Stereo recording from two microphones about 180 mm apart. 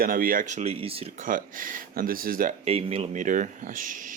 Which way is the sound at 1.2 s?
50° right (ahead or behind).